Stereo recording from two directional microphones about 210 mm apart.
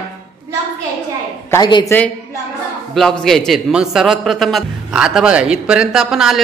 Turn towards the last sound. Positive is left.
turn(degrees=-5)  # may be behind; listen again after turning